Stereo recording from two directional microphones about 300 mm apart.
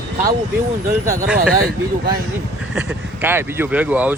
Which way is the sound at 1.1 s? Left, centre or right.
Centre.